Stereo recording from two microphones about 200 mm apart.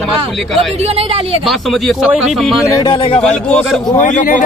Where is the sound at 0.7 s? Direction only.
30° right (ahead or behind).